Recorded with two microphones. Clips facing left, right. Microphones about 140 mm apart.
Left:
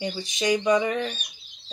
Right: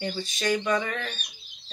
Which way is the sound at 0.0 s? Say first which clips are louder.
Left 2 dB; 15° left (ahead or behind).